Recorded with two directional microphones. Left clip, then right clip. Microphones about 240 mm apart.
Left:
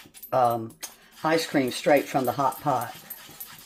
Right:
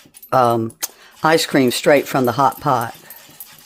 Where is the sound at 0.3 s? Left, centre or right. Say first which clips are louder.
Right 8 dB; right.